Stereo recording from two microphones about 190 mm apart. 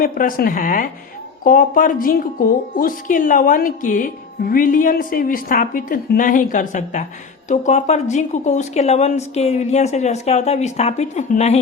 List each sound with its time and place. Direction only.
0.0 s a woman's voice: 50° left (ahead or behind)